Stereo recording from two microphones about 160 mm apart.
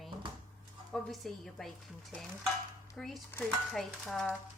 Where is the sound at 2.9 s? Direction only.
Centre (ahead or behind).